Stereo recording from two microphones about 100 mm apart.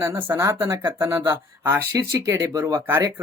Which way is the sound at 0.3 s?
25° right (ahead or behind).